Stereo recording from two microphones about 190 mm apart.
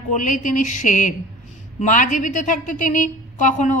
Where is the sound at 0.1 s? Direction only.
40° left (ahead or behind).